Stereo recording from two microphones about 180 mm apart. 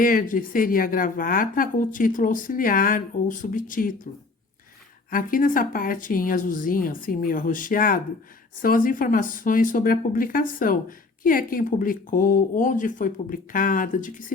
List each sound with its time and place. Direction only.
0.0 s speech: 50° left (ahead or behind)
5.1 s speech: 50° left (ahead or behind)